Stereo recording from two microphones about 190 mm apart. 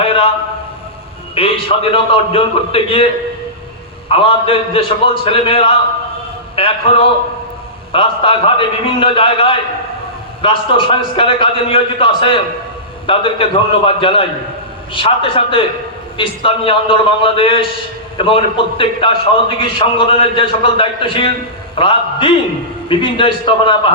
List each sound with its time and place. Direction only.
0.0 s a sound: 30° left (ahead or behind)
1.4 s a man's voice: 30° left (ahead or behind)
4.1 s a man's voice: 30° left (ahead or behind)
7.9 s a man's voice: 30° left (ahead or behind)